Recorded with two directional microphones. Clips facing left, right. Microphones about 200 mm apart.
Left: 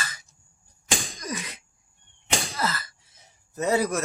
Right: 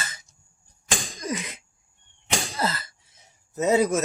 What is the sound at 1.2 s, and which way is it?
Cough, 25° right (ahead or behind).